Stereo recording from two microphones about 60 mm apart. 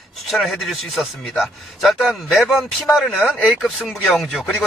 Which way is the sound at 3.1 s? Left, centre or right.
Centre.